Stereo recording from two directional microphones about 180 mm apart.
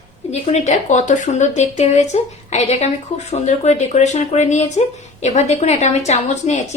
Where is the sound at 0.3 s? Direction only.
40° left (ahead or behind).